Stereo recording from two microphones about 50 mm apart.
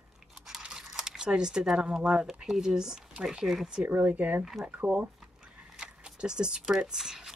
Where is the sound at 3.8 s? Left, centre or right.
Right.